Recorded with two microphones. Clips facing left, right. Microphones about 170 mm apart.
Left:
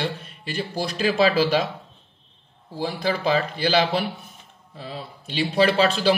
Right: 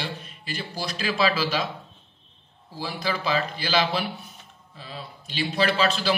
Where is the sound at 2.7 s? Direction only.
50° left (ahead or behind).